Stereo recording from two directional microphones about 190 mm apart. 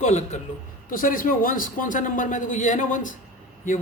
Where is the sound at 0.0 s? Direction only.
40° left (ahead or behind).